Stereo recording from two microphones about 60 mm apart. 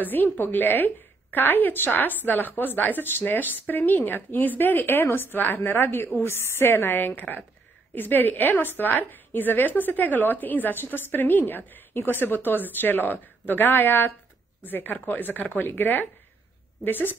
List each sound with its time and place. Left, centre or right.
0.0 s a woman's voice: left